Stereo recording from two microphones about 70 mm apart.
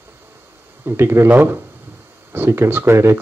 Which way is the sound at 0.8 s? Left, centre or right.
Right.